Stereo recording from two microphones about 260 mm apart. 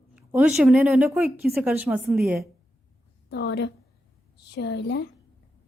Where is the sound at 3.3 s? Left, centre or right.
Left.